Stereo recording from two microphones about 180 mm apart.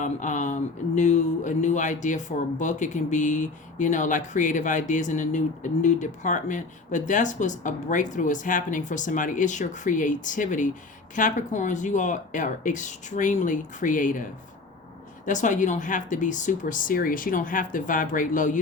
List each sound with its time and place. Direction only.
0.0 s speech: 45° left (ahead or behind)
15.3 s speech: 45° left (ahead or behind)